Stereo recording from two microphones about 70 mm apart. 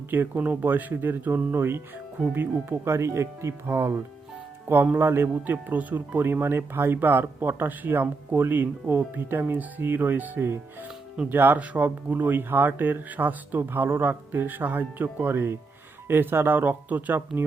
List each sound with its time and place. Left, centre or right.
0.1 s speech: right
4.9 s speech: right